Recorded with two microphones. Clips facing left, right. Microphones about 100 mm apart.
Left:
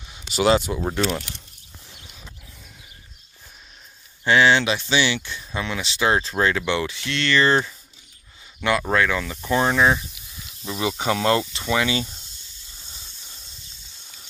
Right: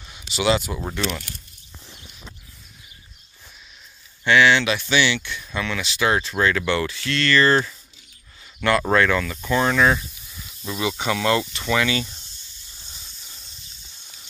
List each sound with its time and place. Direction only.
0.3 s speech: 40° left (ahead or behind)
4.2 s speech: 35° left (ahead or behind); by 9.2 s 5° left (ahead or behind)
9.2 s speech: 25° left (ahead or behind)